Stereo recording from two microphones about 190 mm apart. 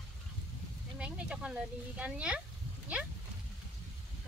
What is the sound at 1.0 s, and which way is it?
Speech, 5° right (ahead or behind).